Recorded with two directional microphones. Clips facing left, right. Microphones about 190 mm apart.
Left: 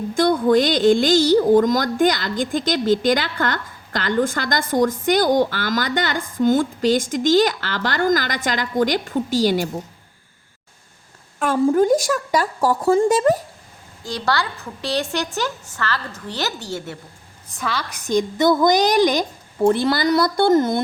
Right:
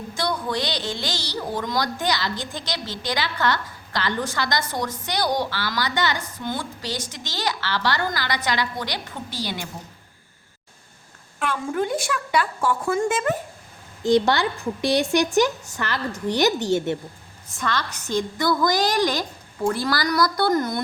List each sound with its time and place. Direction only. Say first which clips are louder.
0.1 s speech: left 11 dB; 50° left (ahead or behind)
11.3 s a woman's voice: left 9 dB; 40° left (ahead or behind)
14.0 s a woman's voice: right 5 dB; 20° right (ahead or behind)
17.6 s a woman's voice: even; 10° left (ahead or behind); by 20.8 s 25° left (ahead or behind)